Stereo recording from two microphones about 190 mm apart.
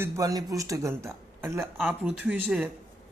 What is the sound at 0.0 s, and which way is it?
Speech, 20° right (ahead or behind).